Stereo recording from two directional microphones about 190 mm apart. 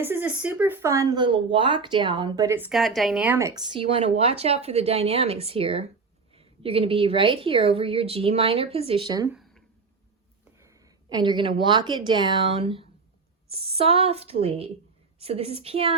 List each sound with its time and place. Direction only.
0.0 s speech: 10° right (ahead or behind)
9.3 s a sound: centre (ahead or behind)
10.6 s a woman's voice: 15° right (ahead or behind)